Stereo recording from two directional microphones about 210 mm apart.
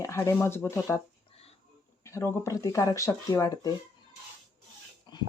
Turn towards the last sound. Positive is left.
turn(degrees=20)  # may be behind; listen again after turning